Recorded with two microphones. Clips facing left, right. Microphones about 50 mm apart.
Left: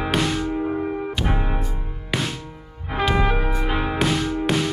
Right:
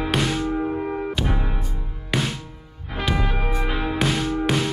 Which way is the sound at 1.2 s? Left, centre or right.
Centre.